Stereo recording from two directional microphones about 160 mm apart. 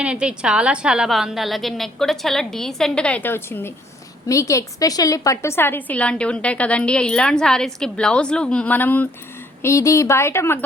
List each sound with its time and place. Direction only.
0.0 s a woman's voice: 5° right (ahead or behind); by 10.6 s 15° left (ahead or behind)